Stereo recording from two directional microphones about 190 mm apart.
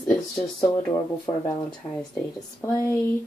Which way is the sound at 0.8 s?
15° left (ahead or behind).